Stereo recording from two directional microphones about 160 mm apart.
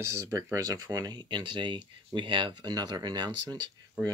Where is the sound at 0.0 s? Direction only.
15° right (ahead or behind).